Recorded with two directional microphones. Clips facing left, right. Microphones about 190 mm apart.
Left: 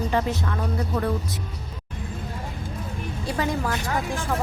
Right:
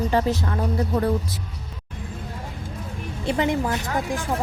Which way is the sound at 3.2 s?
20° right (ahead or behind).